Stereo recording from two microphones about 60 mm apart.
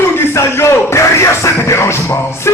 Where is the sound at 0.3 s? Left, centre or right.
Left.